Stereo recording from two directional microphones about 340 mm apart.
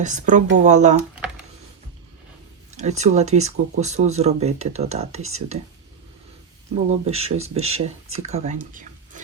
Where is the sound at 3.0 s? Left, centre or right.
Centre.